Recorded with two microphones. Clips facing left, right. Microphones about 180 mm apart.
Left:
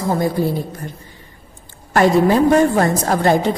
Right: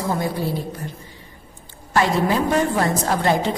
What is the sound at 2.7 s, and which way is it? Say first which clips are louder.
Speech: left 4 dB; 45° left (ahead or behind).